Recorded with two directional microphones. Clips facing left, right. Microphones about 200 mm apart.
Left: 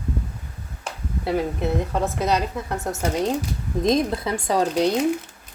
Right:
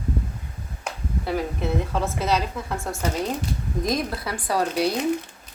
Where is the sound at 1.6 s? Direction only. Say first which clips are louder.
Left 2 dB; 15° left (ahead or behind).